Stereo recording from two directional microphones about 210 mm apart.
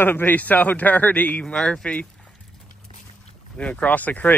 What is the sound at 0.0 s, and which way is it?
A man's voice, 10° left (ahead or behind).